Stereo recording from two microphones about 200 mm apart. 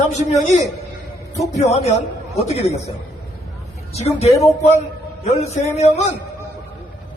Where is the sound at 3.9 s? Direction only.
30° left (ahead or behind).